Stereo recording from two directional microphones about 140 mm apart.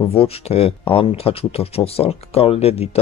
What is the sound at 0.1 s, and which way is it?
Speech, 45° left (ahead or behind).